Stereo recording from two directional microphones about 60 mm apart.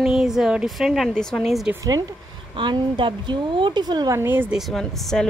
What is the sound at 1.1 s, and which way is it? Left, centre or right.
Speech, centre.